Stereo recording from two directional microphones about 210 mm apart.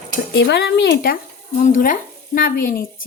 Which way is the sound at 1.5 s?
35° left (ahead or behind).